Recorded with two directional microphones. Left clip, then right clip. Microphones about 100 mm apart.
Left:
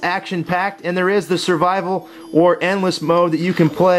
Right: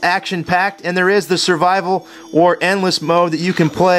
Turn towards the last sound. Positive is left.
turn(degrees=-40)  # may be behind; listen again after turning